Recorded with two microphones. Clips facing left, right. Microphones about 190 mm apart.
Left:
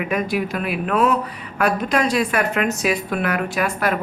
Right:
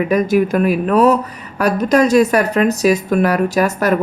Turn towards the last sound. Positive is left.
turn(degrees=-40)  # may be behind; listen again after turning